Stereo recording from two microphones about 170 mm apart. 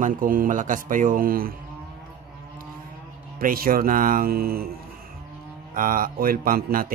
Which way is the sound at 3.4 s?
55° right (ahead or behind).